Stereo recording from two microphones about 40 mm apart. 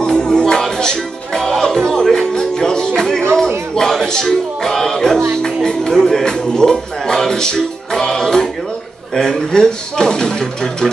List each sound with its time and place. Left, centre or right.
0.0 s music: centre
3.7 s a sound: centre
5.4 s music: centre
9.1 s speech: centre